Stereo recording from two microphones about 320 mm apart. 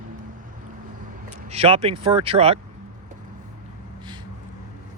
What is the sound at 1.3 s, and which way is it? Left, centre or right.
Speech, centre.